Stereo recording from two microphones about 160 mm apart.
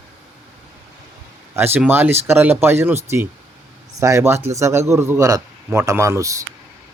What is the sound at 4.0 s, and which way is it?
A man's voice, 20° right (ahead or behind).